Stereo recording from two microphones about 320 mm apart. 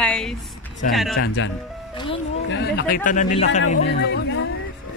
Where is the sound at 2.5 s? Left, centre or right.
Left.